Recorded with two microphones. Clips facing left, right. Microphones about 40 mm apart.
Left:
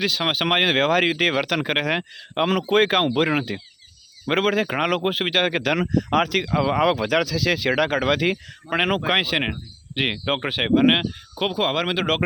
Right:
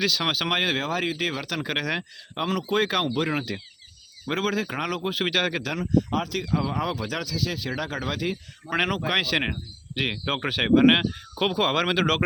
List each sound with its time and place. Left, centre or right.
0.0 s speech: left
0.8 s speech: left
5.2 s speech: left
5.6 s speech: left
6.3 s speech: left
7.3 s speech: left
9.1 s speech: left